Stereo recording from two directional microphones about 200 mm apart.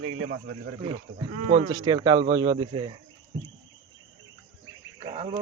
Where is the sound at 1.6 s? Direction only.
20° right (ahead or behind).